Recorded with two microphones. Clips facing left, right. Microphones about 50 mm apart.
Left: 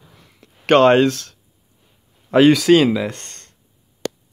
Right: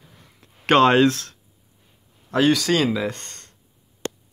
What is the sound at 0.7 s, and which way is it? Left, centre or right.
Speech, centre.